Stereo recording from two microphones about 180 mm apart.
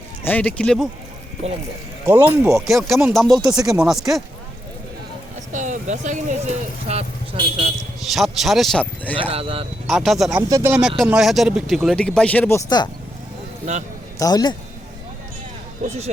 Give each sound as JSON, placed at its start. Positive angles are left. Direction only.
{"t": 0.3, "sound": "speech", "side_deg": 10}
{"t": 1.4, "sound": "speech", "side_deg": -35}
{"t": 2.0, "sound": "speech", "side_deg": -10}
{"t": 5.5, "sound": "a sound", "side_deg": -45}
{"t": 6.8, "sound": "speech", "side_deg": -35}
{"t": 8.1, "sound": "speech", "side_deg": 0}
{"t": 9.3, "sound": "speech", "side_deg": -30}
{"t": 9.8, "sound": "speech", "side_deg": 0}
{"t": 14.2, "sound": "a man's voice", "side_deg": 20}